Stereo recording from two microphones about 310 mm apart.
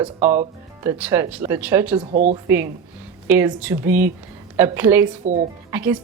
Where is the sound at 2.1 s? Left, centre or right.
Right.